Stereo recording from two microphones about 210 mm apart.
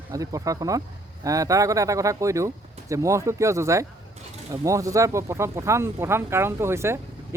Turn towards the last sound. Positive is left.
turn(degrees=-10)  # may be behind; listen again after turning